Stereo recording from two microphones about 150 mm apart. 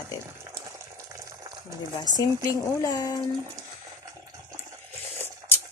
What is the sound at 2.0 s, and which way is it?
Speech, 25° left (ahead or behind).